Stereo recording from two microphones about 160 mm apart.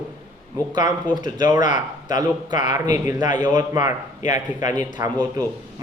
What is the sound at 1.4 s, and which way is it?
A man's voice, 25° right (ahead or behind).